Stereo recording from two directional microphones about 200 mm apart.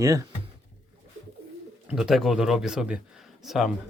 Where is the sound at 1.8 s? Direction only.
Centre (ahead or behind).